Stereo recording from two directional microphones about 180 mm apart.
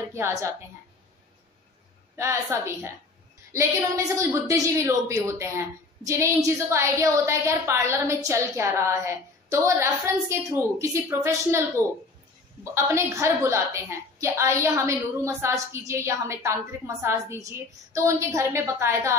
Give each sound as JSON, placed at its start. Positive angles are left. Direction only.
{"t": 0.1, "sound": "a woman's voice", "side_deg": -15}
{"t": 2.1, "sound": "a woman's voice", "side_deg": -15}
{"t": 12.7, "sound": "a woman's voice", "side_deg": -15}